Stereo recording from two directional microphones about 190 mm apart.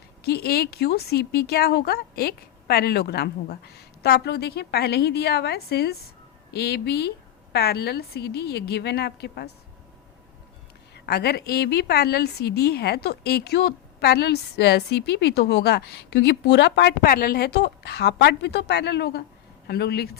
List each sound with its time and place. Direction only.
0.2 s a woman's voice: 55° left (ahead or behind)
10.9 s a woman's voice: 60° left (ahead or behind)